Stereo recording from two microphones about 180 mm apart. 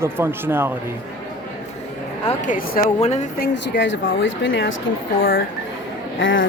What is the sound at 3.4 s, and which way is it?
A woman's voice, 85° left.